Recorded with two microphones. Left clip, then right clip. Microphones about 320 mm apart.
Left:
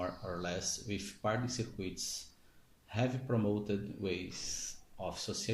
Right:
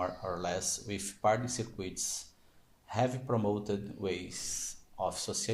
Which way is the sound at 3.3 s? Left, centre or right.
Right.